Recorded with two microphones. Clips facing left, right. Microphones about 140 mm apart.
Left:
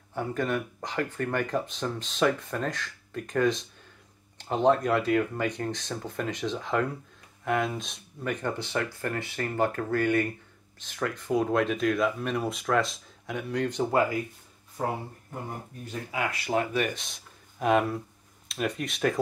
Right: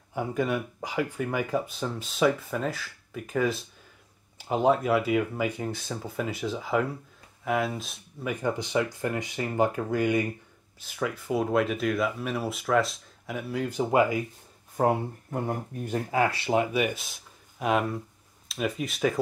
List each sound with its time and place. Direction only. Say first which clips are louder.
0.1 s speech: right 1 dB; 10° right (ahead or behind)
14.8 s speech: right 7 dB; 55° right (ahead or behind)
16.1 s speech: right 4 dB; 35° right (ahead or behind)
16.7 s speech: right 2 dB; 10° right (ahead or behind)